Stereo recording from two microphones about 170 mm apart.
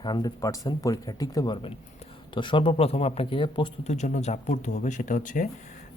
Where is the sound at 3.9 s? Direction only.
45° left (ahead or behind).